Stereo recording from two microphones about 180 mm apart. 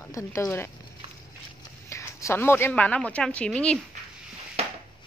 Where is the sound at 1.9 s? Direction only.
15° left (ahead or behind).